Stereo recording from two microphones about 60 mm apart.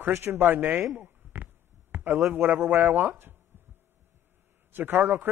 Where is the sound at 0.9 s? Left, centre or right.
Right.